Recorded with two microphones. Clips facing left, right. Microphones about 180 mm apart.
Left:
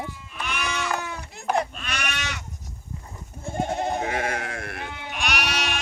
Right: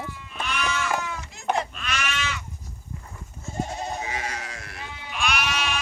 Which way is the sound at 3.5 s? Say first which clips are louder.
Left 5 dB; 60° left (ahead or behind).